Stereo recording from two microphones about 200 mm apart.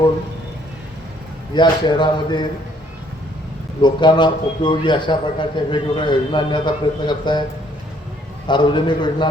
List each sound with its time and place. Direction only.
1.5 s a man's voice: 25° left (ahead or behind)
3.8 s a man's voice: 25° left (ahead or behind)
8.4 s a man's voice: 25° left (ahead or behind)